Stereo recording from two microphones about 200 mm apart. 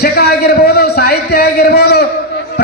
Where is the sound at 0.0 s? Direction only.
55° left (ahead or behind).